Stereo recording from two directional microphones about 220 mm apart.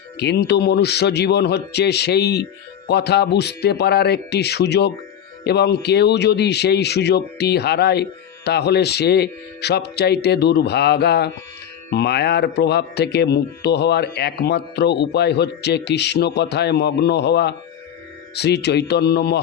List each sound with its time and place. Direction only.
0.2 s speech: 50° left (ahead or behind)